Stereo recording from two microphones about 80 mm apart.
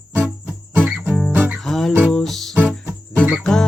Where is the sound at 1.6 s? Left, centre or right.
Centre.